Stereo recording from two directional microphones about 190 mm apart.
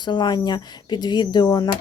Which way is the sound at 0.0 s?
20° left (ahead or behind).